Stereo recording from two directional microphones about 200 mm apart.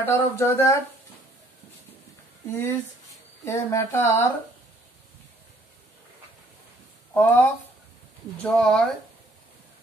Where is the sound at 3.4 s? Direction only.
15° left (ahead or behind).